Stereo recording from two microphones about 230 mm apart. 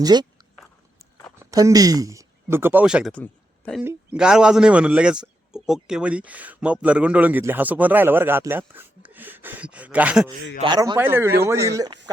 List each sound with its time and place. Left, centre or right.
0.0 s a man's voice: centre
1.4 s a man's voice: centre
10.6 s a man's voice: centre
12.1 s a sound: centre